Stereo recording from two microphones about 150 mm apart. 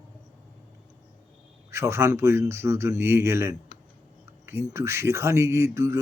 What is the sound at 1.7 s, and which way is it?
Speech, 20° right (ahead or behind).